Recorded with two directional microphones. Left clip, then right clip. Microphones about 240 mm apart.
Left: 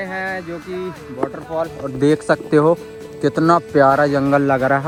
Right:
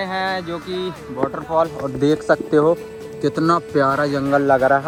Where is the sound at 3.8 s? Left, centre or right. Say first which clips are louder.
Left 5 dB; centre; by 4.8 s left.